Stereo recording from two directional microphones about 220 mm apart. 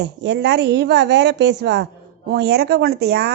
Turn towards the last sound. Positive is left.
turn(degrees=-45)  # may be behind; listen again after turning